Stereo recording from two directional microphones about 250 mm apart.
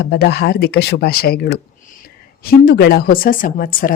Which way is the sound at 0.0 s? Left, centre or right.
Left.